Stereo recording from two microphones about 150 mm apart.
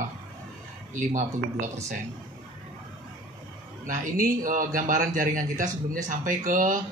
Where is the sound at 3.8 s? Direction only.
60° right (ahead or behind).